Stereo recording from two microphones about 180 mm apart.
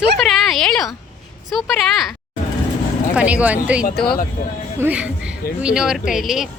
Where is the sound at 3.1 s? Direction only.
5° right (ahead or behind).